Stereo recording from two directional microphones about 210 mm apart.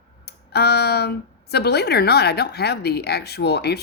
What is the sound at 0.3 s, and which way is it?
Speech, 50° left (ahead or behind).